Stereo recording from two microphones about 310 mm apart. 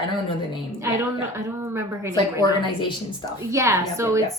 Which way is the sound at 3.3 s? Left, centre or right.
Centre.